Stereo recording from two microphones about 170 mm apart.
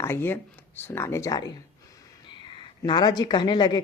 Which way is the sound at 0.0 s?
15° left (ahead or behind).